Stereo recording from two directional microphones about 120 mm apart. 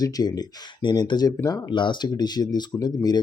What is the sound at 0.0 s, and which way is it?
Speech, 35° left (ahead or behind).